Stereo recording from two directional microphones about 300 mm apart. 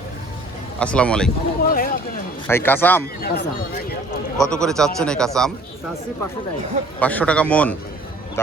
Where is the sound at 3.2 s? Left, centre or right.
Left.